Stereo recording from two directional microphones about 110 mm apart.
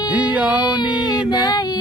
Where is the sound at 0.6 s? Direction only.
45° left (ahead or behind).